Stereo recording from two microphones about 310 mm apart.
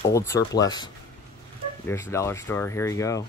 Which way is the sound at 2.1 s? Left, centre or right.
Centre.